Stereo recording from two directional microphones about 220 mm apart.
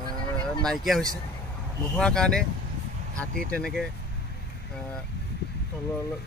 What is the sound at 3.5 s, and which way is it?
Speech, centre (ahead or behind).